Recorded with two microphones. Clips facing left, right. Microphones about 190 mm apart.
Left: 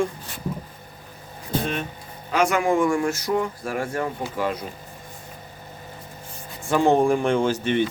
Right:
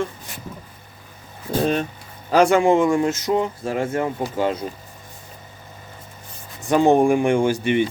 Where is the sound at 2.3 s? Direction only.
30° right (ahead or behind).